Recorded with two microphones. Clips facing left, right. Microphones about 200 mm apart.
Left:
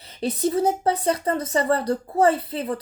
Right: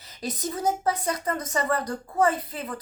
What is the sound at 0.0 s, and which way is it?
Speech, 30° left (ahead or behind).